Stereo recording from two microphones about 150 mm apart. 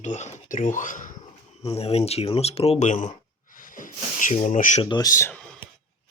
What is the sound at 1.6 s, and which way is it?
Speech, 40° left (ahead or behind).